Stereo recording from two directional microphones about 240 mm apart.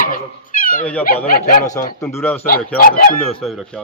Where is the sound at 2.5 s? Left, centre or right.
Left.